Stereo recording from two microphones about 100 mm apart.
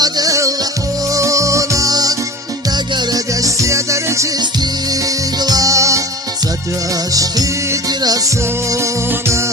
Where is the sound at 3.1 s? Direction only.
35° right (ahead or behind).